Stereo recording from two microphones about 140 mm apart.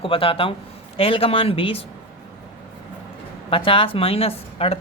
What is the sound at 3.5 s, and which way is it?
Speech, 40° left (ahead or behind).